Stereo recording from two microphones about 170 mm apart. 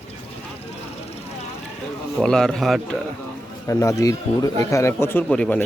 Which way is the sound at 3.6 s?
20° left (ahead or behind).